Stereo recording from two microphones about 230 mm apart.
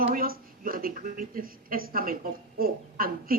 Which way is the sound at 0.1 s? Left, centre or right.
Right.